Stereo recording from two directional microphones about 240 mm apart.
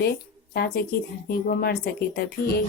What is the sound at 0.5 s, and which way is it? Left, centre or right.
A woman's voice, left.